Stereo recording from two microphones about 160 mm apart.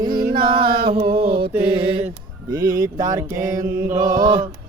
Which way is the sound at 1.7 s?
35° right (ahead or behind).